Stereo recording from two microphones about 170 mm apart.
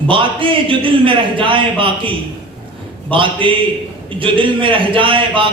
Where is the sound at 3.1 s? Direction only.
30° right (ahead or behind).